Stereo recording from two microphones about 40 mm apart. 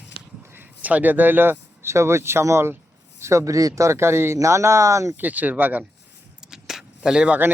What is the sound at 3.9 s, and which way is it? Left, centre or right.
Speech, right.